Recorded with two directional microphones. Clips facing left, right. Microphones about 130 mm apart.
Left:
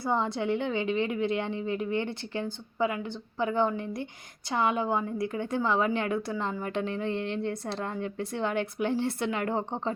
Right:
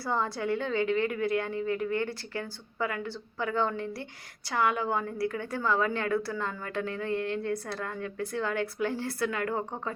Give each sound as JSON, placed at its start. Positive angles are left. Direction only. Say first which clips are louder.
{"t": 0.0, "sound": "a woman's voice", "louder": "left 2 dB", "side_deg": 20}